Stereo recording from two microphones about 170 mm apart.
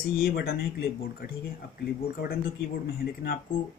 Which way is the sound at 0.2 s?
65° left (ahead or behind).